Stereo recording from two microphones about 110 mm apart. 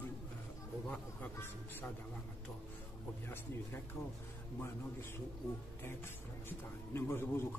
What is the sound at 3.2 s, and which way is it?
Speech, 20° left (ahead or behind).